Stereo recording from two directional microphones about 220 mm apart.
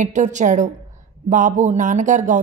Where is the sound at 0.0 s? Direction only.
35° right (ahead or behind).